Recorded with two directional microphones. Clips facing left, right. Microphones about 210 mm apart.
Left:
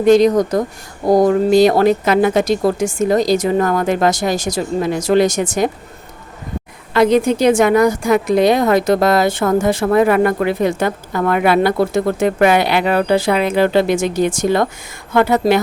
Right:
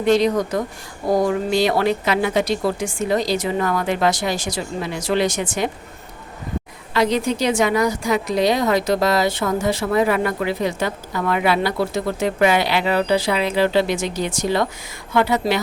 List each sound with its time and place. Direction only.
0.0 s a woman's voice: 45° left (ahead or behind)
6.9 s a woman's voice: 55° left (ahead or behind)